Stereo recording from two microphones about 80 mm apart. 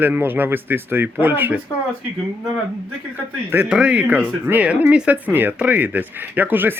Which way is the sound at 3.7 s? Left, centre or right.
Centre.